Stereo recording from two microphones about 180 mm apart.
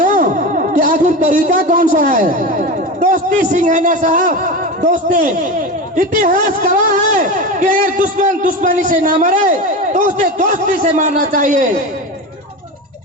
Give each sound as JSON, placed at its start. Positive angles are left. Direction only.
{"t": 0.0, "sound": "a man's voice", "side_deg": -45}